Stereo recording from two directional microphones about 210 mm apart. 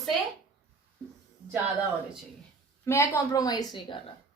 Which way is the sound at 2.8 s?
10° left (ahead or behind).